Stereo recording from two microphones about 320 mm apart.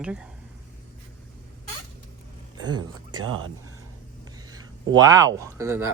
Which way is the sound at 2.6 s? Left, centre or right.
Centre.